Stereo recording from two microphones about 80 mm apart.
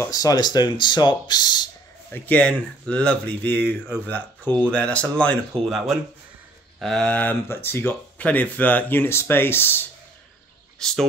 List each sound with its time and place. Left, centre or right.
0.1 s speech: left
2.1 s speech: centre
5.7 s speech: centre
7.1 s speech: centre
7.4 s speech: left
10.8 s speech: centre